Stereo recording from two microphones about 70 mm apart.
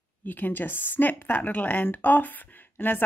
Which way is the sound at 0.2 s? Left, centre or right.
Left.